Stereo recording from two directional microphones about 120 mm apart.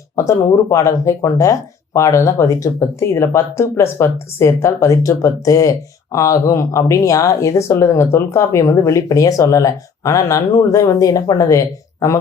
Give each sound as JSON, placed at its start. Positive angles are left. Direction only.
{"t": 0.2, "sound": "speech", "side_deg": 25}